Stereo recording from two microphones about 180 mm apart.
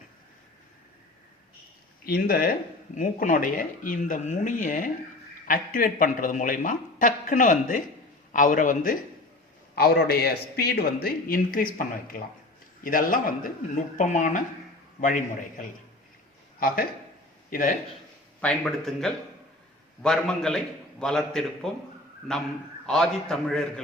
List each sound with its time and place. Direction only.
2.0 s speech: 55° left (ahead or behind)
9.7 s speech: 60° left (ahead or behind)
18.3 s a man's voice: 5° left (ahead or behind)